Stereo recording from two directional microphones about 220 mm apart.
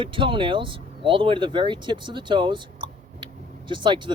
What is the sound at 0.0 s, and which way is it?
Speech, 25° right (ahead or behind).